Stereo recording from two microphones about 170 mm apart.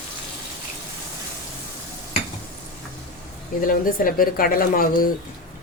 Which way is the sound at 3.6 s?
55° left (ahead or behind).